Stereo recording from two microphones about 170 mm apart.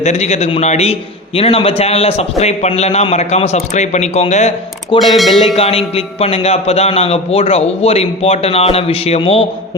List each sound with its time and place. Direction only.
0.0 s a man's voice: 40° left (ahead or behind)
4.9 s speech: centre (ahead or behind)
5.5 s a man's voice: 35° left (ahead or behind)